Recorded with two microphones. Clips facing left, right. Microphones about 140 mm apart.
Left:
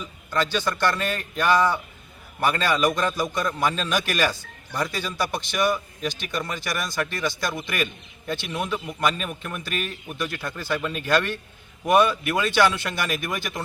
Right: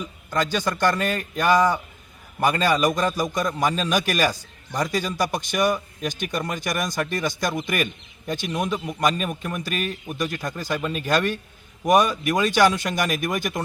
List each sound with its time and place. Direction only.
0.5 s a man's voice: 15° right (ahead or behind)
5.5 s speech: 45° right (ahead or behind)
6.8 s a man's voice: 15° right (ahead or behind)